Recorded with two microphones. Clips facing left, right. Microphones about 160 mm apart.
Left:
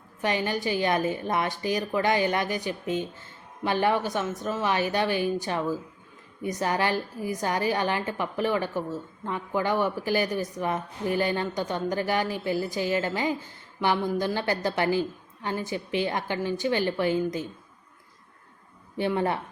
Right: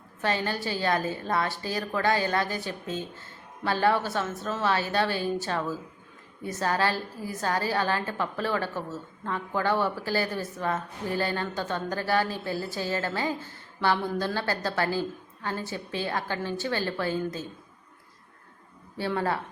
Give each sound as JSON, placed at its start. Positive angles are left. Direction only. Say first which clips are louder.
{"t": 0.2, "sound": "a woman's voice", "louder": "left 2 dB", "side_deg": 15}
{"t": 18.9, "sound": "speech", "louder": "left 2 dB", "side_deg": 20}